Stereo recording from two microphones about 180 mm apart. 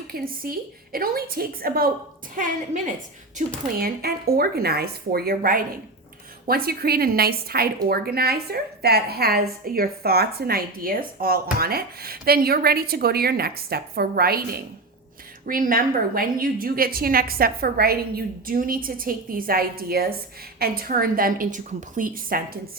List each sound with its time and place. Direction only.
0.1 s a woman's voice: 60° right (ahead or behind)